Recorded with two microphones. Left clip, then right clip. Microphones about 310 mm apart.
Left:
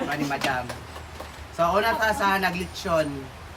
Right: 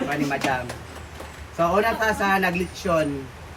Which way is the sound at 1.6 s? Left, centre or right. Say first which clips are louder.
Right 1 dB; centre.